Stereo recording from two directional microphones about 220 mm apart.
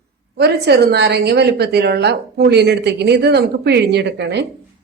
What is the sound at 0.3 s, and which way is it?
A woman's voice, 50° right (ahead or behind).